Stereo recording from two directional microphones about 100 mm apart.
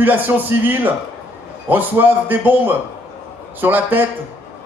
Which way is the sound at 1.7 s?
20° right (ahead or behind).